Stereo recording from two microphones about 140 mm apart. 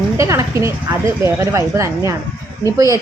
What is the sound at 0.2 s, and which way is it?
A woman's voice, 20° right (ahead or behind).